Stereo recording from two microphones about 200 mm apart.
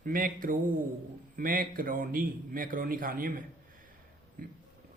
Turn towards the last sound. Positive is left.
turn(degrees=-45)  # may be behind; listen again after turning